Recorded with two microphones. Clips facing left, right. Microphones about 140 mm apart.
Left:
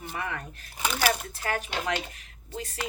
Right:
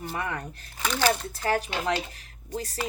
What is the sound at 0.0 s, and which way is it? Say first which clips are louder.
Speech: right 3 dB; 35° right (ahead or behind).